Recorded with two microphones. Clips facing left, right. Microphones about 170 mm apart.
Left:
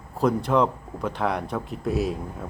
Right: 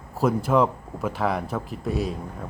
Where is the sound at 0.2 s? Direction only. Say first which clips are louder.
Right 1 dB; 5° right (ahead or behind).